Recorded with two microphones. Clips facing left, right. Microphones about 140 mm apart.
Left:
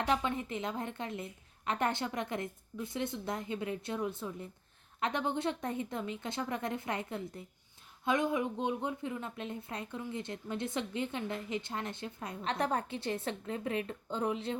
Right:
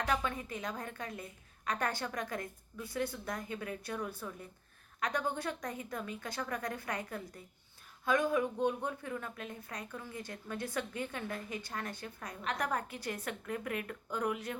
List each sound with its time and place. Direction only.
0.0 s speech: 25° left (ahead or behind)